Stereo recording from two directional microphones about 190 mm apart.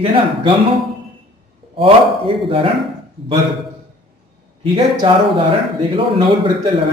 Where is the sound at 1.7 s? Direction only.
30° right (ahead or behind).